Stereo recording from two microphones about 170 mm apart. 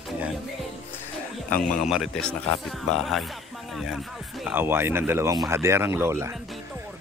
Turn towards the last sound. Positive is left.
turn(degrees=-15)  # may be behind; listen again after turning